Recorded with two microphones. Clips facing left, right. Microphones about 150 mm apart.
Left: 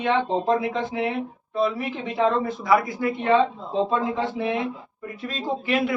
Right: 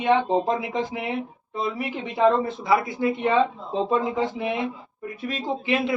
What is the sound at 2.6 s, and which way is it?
Speech, 25° right (ahead or behind).